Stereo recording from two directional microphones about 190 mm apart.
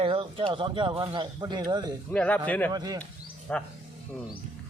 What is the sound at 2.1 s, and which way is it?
Speech, 5° left (ahead or behind).